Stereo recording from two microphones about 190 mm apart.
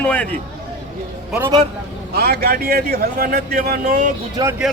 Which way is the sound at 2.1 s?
55° right (ahead or behind).